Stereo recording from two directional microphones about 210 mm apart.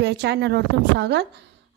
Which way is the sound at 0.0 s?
55° right (ahead or behind).